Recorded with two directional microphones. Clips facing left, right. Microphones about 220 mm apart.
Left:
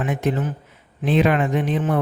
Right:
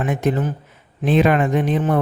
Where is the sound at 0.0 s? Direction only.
45° right (ahead or behind).